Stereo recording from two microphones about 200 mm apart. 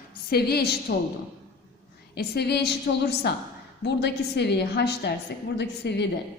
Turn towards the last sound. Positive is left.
turn(degrees=55)  # may be behind; listen again after turning